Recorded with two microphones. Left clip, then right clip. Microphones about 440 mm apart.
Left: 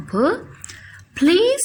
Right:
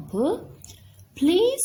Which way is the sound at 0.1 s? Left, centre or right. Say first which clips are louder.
Left 6 dB; left.